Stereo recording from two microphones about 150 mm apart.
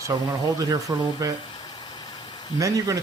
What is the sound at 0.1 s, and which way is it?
A man's voice, 30° right (ahead or behind).